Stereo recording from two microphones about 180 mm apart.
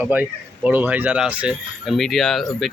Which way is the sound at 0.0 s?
10° right (ahead or behind).